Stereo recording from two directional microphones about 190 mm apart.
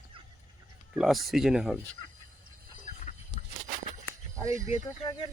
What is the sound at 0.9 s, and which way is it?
Speech, centre (ahead or behind).